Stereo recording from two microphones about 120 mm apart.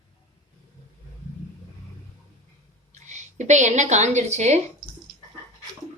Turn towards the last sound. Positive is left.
turn(degrees=-70)  # may be behind; listen again after turning